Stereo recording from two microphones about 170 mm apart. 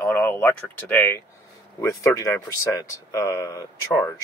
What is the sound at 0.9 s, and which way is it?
Speech, 15° left (ahead or behind).